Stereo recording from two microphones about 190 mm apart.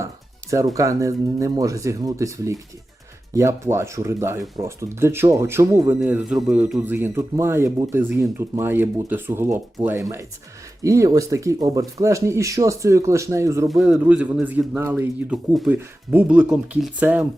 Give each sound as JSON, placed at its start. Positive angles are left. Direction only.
{"t": 0.5, "sound": "speech", "side_deg": -15}
{"t": 10.8, "sound": "speech", "side_deg": -15}
{"t": 13.7, "sound": "speech", "side_deg": 0}